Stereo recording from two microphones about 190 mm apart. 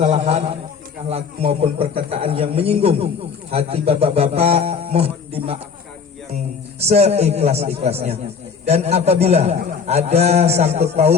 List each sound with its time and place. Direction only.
0.0 s speech: 35° right (ahead or behind)